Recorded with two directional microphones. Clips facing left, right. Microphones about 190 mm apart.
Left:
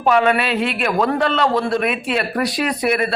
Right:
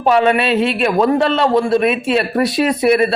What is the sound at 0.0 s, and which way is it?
A man's voice, 25° right (ahead or behind).